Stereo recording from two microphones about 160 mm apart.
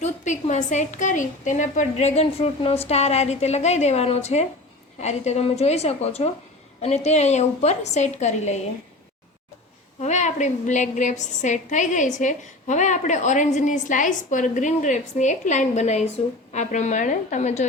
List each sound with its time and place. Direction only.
0.0 s a woman's voice: 45° left (ahead or behind)
10.0 s a woman's voice: 45° left (ahead or behind)